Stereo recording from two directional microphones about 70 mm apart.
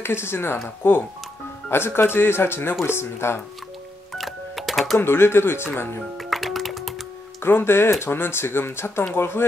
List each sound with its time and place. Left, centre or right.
0.0 s speech: left
1.7 s speech: left
4.1 s music: centre
4.9 s speech: left
6.1 s music: centre
7.4 s speech: left